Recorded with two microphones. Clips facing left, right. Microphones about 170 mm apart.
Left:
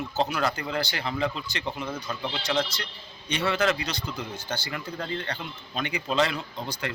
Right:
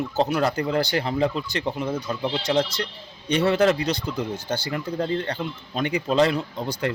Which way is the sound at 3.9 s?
50° right (ahead or behind).